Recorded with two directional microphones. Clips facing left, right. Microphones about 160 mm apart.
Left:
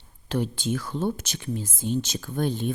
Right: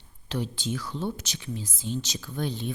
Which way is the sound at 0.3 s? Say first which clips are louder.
Left 4 dB; 50° left (ahead or behind).